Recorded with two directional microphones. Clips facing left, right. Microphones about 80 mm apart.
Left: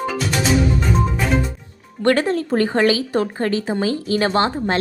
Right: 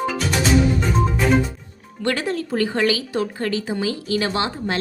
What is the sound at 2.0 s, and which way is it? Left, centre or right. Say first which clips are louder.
A woman's voice: left 6 dB; left.